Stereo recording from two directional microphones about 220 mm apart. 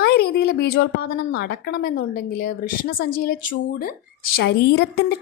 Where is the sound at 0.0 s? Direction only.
45° left (ahead or behind).